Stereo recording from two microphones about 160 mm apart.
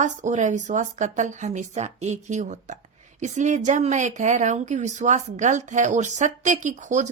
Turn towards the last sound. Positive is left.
turn(degrees=-50)  # may be behind; listen again after turning